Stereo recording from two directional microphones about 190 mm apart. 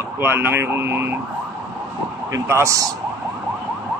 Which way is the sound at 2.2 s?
15° right (ahead or behind).